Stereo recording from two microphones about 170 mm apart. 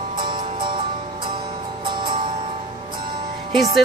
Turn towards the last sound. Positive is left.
turn(degrees=-25)  # may be behind; listen again after turning